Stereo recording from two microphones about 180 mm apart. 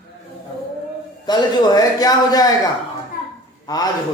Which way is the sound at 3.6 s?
20° left (ahead or behind).